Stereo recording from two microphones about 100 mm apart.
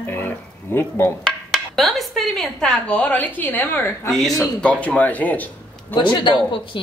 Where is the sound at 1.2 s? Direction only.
Centre (ahead or behind); by 4.1 s 20° left (ahead or behind).